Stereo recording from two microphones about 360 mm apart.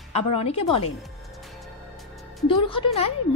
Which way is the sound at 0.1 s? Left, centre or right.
Centre.